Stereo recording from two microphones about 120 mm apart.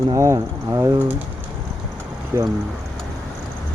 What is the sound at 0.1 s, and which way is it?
Speech, 25° right (ahead or behind).